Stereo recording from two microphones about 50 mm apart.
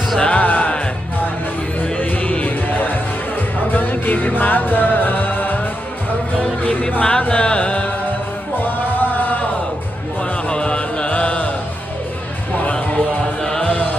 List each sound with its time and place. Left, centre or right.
0.2 s music: left
6.6 s music: left
8.5 s music: left
10.5 s music: left
12.6 s music: left